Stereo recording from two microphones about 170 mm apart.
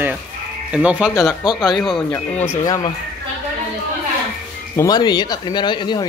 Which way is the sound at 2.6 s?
20° left (ahead or behind).